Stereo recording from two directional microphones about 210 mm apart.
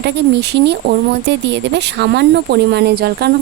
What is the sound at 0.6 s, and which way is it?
Speech, 55° right (ahead or behind).